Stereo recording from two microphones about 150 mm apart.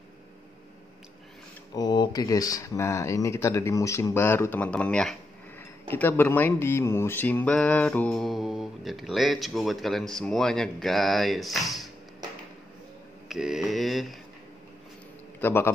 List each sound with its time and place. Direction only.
1.8 s speech: 30° left (ahead or behind); by 11.9 s centre (ahead or behind)
13.3 s speech: 5° right (ahead or behind)
15.4 s a man's voice: 15° left (ahead or behind)